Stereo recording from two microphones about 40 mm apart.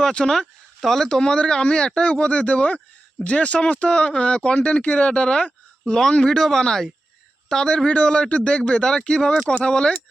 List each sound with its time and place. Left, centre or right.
0.1 s speech: centre
0.8 s speech: centre; by 9.9 s left